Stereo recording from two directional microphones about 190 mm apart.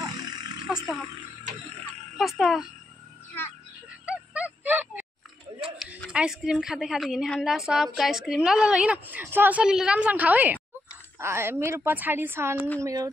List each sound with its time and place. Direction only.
0.0 s a sound: 20° right (ahead or behind)
2.1 s a woman's voice: centre (ahead or behind)
4.0 s music: 5° right (ahead or behind)
6.0 s a woman's voice: 5° right (ahead or behind)